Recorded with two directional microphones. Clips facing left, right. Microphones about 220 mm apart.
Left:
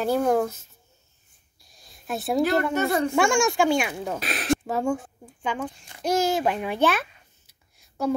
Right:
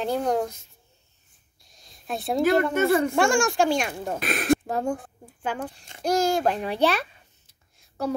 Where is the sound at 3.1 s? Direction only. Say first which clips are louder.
Even; centre (ahead or behind).